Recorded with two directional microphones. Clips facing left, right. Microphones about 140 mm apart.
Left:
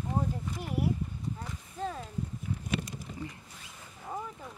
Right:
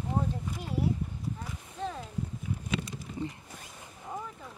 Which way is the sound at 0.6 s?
15° left (ahead or behind).